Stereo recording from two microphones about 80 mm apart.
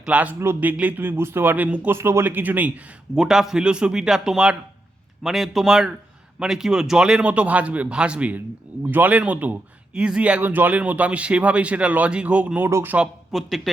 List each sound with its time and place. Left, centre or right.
0.0 s speech: centre
1.9 s speech: right
3.2 s speech: centre; by 13.0 s right
13.3 s speech: centre